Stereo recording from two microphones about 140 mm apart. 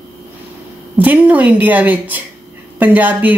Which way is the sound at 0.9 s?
10° right (ahead or behind).